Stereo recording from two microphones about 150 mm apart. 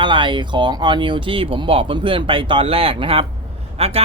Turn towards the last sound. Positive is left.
turn(degrees=-45)  # may be behind; listen again after turning